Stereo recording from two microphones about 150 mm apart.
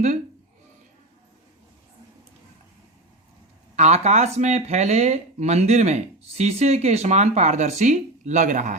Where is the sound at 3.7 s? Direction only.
50° right (ahead or behind).